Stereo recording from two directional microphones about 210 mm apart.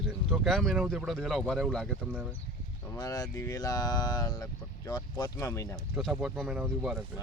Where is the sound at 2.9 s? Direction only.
20° left (ahead or behind).